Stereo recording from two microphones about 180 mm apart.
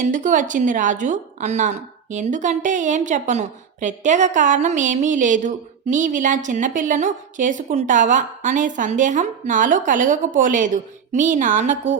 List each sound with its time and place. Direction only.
0.0 s a woman's voice: 45° right (ahead or behind)